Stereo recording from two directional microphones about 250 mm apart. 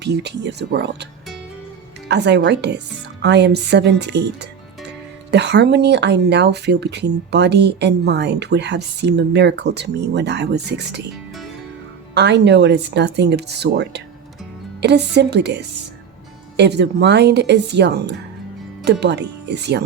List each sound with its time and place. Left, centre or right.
0.0 s speech: right
2.0 s speech: right
12.1 s speech: right